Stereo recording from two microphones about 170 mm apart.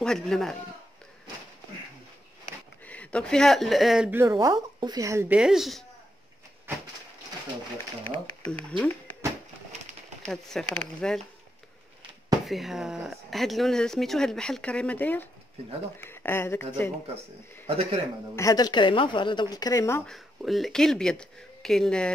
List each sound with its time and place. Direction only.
0.0 s speech: 5° left (ahead or behind)
2.9 s speech: 5° left (ahead or behind)
4.1 s speech: 15° right (ahead or behind)
5.4 s speech: centre (ahead or behind)
6.7 s a sound: 10° right (ahead or behind)
8.5 s speech: 5° left (ahead or behind)
10.2 s speech: 5° left (ahead or behind)
12.4 s speech: centre (ahead or behind); by 16.6 s 15° left (ahead or behind)
17.6 s a man's voice: 35° right (ahead or behind)
18.3 s a woman's voice: 20° left (ahead or behind)
20.1 s speech: centre (ahead or behind)